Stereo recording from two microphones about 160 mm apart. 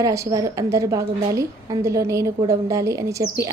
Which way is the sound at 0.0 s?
20° right (ahead or behind).